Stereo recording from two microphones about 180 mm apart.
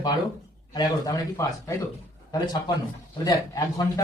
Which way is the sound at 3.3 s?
20° left (ahead or behind).